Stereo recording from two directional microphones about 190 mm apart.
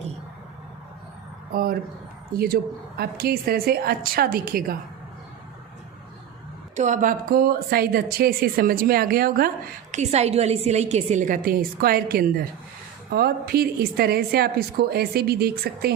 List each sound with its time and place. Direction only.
1.5 s a woman's voice: 50° right (ahead or behind)
3.0 s a woman's voice: 55° right (ahead or behind)
6.7 s a woman's voice: 40° right (ahead or behind)
9.9 s a woman's voice: 35° right (ahead or behind); by 15.9 s 55° right (ahead or behind)